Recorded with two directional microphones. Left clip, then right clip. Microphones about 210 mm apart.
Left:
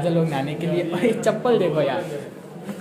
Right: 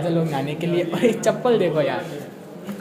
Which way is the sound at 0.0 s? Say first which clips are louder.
Left 1 dB; centre (ahead or behind).